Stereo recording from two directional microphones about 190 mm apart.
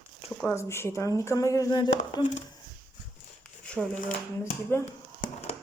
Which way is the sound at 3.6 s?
5° left (ahead or behind).